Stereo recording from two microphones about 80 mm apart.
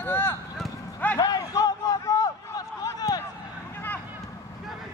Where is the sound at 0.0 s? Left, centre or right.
Left.